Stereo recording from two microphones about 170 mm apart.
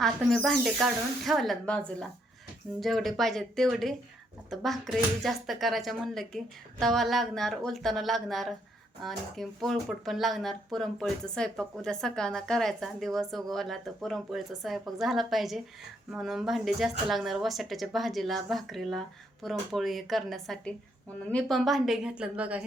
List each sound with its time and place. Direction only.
0.0 s speech: centre (ahead or behind)